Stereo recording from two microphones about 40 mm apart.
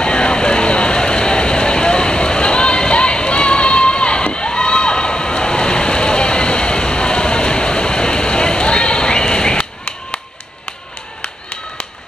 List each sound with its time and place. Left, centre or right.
0.0 s vehicle: left